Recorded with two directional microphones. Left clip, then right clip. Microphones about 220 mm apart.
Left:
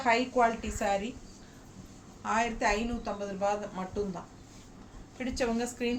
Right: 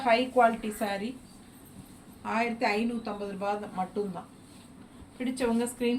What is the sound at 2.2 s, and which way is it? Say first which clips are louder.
A woman's voice: even; 15° left (ahead or behind).